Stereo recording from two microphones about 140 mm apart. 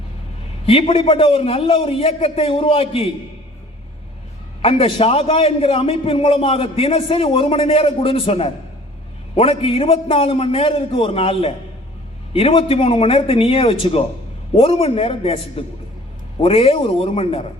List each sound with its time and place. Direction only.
0.6 s a man's voice: 40° left (ahead or behind)
4.6 s a man's voice: 45° left (ahead or behind)